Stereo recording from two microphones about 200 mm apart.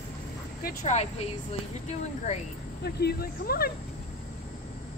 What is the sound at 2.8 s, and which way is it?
Speech, 50° left (ahead or behind).